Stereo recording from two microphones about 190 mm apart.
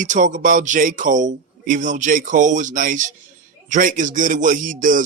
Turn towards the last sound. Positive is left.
turn(degrees=-45)  # may be behind; listen again after turning